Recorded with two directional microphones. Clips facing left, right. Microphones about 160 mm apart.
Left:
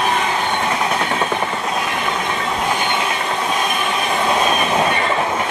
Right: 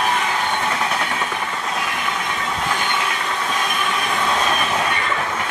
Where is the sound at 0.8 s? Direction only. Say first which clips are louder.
Left 4 dB; 25° left (ahead or behind).